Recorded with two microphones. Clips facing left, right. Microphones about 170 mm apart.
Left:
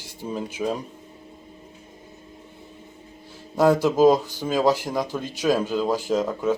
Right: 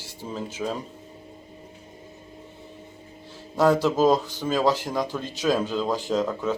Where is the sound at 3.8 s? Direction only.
10° left (ahead or behind).